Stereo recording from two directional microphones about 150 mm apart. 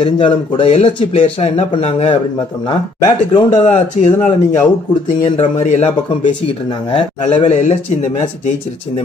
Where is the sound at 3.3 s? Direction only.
30° left (ahead or behind).